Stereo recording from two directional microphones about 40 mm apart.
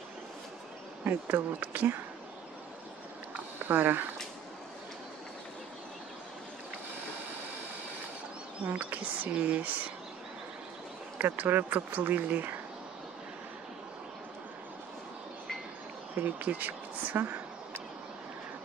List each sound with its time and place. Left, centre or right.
1.0 s speech: right
3.6 s speech: right
8.6 s speech: right
11.1 s speech: right
16.2 s speech: right